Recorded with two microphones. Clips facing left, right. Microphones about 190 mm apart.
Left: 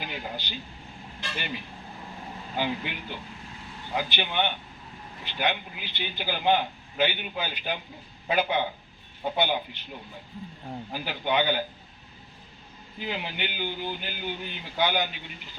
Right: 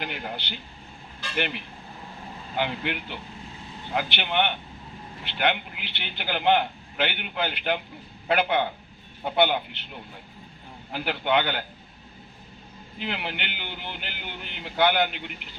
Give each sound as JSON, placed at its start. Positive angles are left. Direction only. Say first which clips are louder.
{"t": 0.0, "sound": "air conditioning", "louder": "right 2 dB", "side_deg": -60}
{"t": 1.4, "sound": "a man's voice", "louder": "right 8 dB", "side_deg": -65}
{"t": 10.9, "sound": "a man's voice", "louder": "right 3 dB", "side_deg": -65}
{"t": 13.0, "sound": "a man's voice", "louder": "even", "side_deg": -65}